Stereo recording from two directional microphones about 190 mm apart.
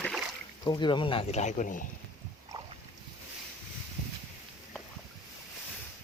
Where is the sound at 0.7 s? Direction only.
25° left (ahead or behind); by 1.9 s 45° left (ahead or behind).